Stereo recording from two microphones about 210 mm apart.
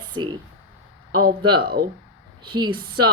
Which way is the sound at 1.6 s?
45° right (ahead or behind).